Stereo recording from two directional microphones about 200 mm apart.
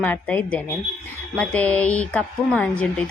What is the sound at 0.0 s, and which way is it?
A woman's voice, 10° left (ahead or behind).